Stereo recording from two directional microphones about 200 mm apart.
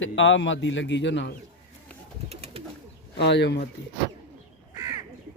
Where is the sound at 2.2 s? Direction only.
30° right (ahead or behind).